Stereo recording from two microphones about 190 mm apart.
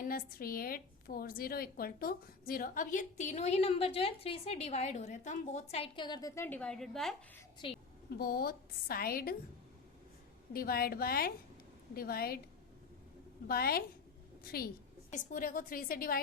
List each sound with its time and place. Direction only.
0.0 s a woman's voice: 50° left (ahead or behind); by 7.2 s centre (ahead or behind)
7.6 s a woman's voice: 25° left (ahead or behind)
8.2 s a woman's voice: 55° left (ahead or behind)
10.5 s a woman's voice: 50° left (ahead or behind)
13.5 s a woman's voice: 55° left (ahead or behind)